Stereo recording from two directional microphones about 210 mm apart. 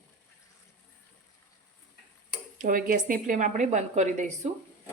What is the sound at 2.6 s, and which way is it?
A woman's voice, 40° right (ahead or behind).